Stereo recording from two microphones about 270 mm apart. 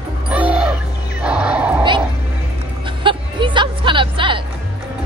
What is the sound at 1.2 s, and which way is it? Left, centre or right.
Horse, centre.